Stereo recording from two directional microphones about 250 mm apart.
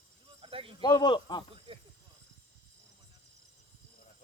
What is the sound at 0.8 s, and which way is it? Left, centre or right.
Speech, centre.